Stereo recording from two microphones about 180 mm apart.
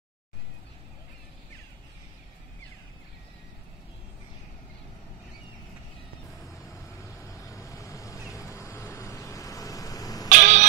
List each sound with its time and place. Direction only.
6.4 s vehicle: centre (ahead or behind)
7.0 s vehicle: 15° left (ahead or behind)
10.3 s a sound: 45° right (ahead or behind)